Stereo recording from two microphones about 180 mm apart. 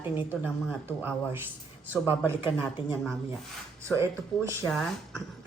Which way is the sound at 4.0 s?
15° right (ahead or behind).